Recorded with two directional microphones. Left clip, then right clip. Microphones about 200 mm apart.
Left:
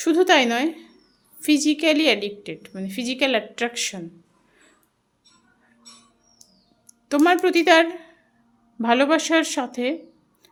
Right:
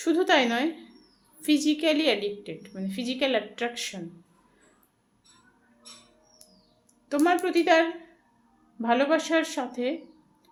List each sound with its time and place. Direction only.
0.0 s a woman's voice: 30° left (ahead or behind)
6.8 s a sound: 40° left (ahead or behind)
7.4 s a woman's voice: 40° left (ahead or behind)